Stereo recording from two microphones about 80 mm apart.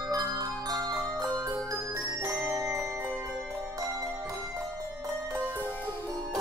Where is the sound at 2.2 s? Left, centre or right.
Right.